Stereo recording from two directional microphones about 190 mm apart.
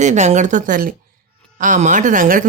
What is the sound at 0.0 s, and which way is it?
Speech, 40° right (ahead or behind).